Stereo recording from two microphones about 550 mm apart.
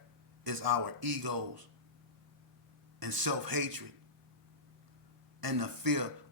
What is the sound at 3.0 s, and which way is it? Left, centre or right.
Speech, right.